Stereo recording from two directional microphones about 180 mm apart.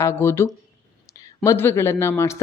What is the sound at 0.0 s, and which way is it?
A woman's voice, 15° left (ahead or behind).